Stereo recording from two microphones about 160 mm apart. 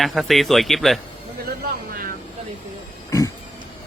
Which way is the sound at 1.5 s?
70° right (ahead or behind).